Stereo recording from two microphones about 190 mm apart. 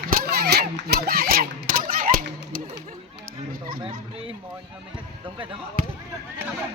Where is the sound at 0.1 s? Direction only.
55° right (ahead or behind).